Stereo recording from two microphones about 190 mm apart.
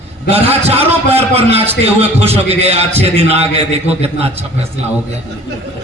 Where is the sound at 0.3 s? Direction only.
30° right (ahead or behind).